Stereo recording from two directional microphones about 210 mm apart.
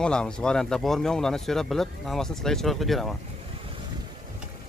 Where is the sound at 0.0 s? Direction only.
5° left (ahead or behind).